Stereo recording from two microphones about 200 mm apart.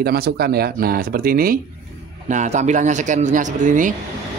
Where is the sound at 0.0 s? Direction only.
50° right (ahead or behind).